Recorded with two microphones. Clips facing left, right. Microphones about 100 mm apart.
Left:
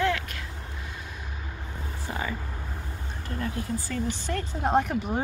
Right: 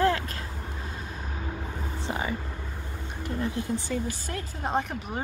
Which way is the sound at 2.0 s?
20° right (ahead or behind).